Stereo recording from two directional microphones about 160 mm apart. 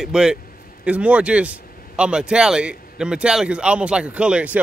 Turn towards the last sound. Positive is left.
turn(degrees=-10)  # may be behind; listen again after turning